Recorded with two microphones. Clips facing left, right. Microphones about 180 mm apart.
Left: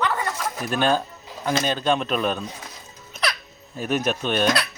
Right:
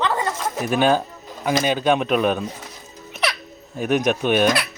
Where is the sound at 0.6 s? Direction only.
5° right (ahead or behind).